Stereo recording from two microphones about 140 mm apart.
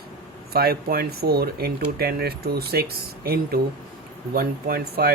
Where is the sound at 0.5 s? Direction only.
90° right.